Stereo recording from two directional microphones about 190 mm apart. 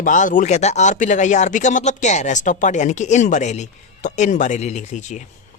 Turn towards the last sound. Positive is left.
turn(degrees=40)  # may be behind; listen again after turning